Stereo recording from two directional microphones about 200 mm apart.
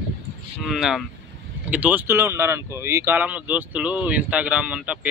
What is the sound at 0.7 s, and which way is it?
Speech, centre (ahead or behind).